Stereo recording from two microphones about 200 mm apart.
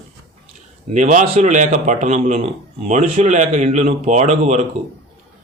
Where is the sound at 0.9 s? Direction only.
40° right (ahead or behind).